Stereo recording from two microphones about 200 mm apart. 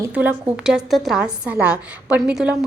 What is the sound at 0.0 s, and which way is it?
A woman's voice, 10° right (ahead or behind).